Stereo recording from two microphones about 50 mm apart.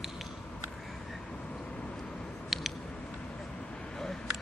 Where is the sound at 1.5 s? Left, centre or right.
Left.